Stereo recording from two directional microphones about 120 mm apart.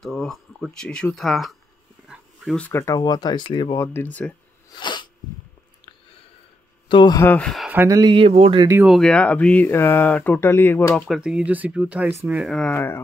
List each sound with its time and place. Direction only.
0.0 s speech: centre (ahead or behind)
2.5 s speech: 10° left (ahead or behind)
3.0 s speech: 35° left (ahead or behind)
3.7 s speech: 20° left (ahead or behind)
4.7 s sneeze: 40° left (ahead or behind)
6.9 s speech: 40° left (ahead or behind)
7.3 s speech: centre (ahead or behind)
7.7 s speech: 20° right (ahead or behind)
8.0 s speech: 45° right (ahead or behind)
8.8 s speech: centre (ahead or behind); by 11.1 s 20° left (ahead or behind)
11.1 s speech: 5° right (ahead or behind)
12.1 s speech: 20° right (ahead or behind)
12.4 s speech: 5° left (ahead or behind)
12.7 s speech: 20° left (ahead or behind)